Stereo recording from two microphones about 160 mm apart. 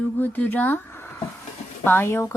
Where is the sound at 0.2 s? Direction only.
10° left (ahead or behind).